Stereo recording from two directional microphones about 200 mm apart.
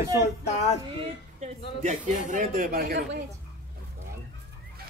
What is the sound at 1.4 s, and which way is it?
Speech, 35° right (ahead or behind).